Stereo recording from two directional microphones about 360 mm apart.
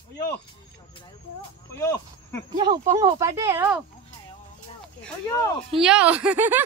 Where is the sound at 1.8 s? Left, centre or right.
Centre.